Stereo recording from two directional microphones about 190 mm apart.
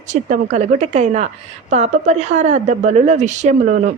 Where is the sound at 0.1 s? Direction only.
40° right (ahead or behind).